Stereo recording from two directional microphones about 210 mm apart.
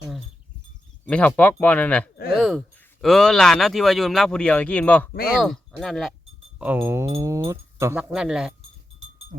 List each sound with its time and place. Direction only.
1.0 s speech: 5° left (ahead or behind)
5.1 s speech: 45° left (ahead or behind)
5.4 s speech: centre (ahead or behind)